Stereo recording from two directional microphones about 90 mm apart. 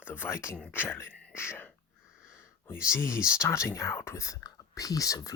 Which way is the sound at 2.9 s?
30° left (ahead or behind).